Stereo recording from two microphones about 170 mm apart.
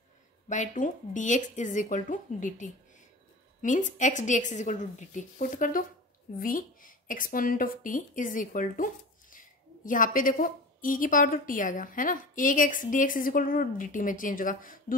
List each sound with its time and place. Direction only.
0.5 s speech: 45° left (ahead or behind)